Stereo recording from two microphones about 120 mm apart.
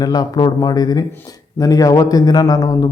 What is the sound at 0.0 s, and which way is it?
A man's voice, 35° left (ahead or behind).